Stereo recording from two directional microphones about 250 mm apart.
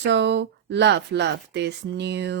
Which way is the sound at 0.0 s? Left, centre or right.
Right.